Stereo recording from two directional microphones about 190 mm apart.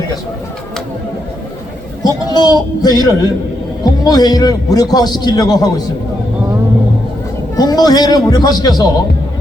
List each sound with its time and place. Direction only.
2.0 s a man's voice: 20° left (ahead or behind)
7.5 s a man's voice: 20° left (ahead or behind)